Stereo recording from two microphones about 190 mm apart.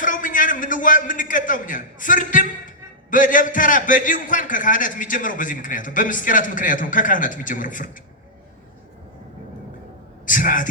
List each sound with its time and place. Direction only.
0.0 s a man's voice: 45° left (ahead or behind)
10.2 s a man's voice: 45° left (ahead or behind)